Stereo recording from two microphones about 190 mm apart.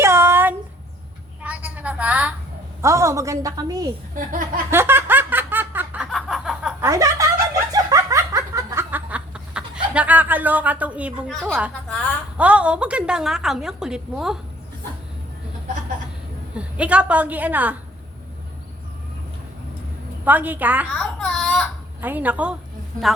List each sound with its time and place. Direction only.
0.0 s a sound: 15° right (ahead or behind)
2.8 s a woman's voice: 15° right (ahead or behind)
4.1 s speech: 45° right (ahead or behind)
4.7 s laughter: 10° right (ahead or behind)
6.8 s speech: 15° right (ahead or behind)
7.7 s snicker: 20° right (ahead or behind); by 11.5 s centre (ahead or behind)
11.9 s a sound: 5° left (ahead or behind)
12.4 s a woman's voice: 5° right (ahead or behind)
16.6 s a woman's voice: 5° right (ahead or behind)
20.2 s a woman's voice: 10° right (ahead or behind)
20.9 s baby cry: 5° left (ahead or behind)
22.0 s a woman's voice: 10° right (ahead or behind)